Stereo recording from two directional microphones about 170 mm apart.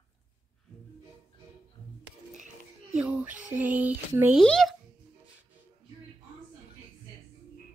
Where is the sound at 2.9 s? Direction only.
5° right (ahead or behind).